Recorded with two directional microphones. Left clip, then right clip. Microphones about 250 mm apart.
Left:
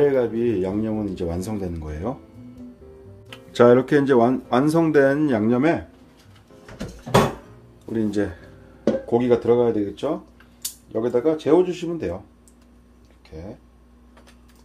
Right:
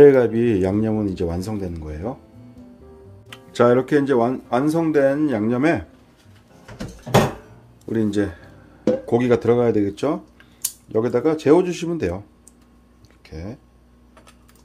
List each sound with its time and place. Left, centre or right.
0.0 s speech: right; by 2.1 s centre
3.3 s speech: centre
7.9 s speech: centre
9.0 s speech: right